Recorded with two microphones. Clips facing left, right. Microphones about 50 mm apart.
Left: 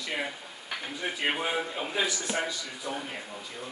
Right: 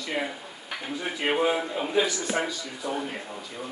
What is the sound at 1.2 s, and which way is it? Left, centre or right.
A man's voice, centre.